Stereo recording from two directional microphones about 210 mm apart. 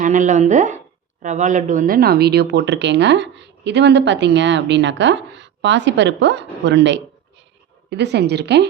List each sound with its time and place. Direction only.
0.0 s a woman's voice: 35° right (ahead or behind); by 8.6 s 55° right (ahead or behind)